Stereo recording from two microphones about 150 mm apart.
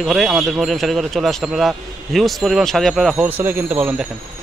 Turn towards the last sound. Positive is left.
turn(degrees=-10)  # may be behind; listen again after turning